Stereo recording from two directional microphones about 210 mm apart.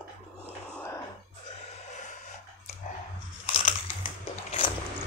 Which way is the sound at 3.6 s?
35° left (ahead or behind).